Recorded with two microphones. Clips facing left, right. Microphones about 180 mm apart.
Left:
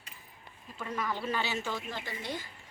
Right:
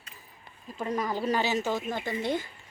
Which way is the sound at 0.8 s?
40° right (ahead or behind).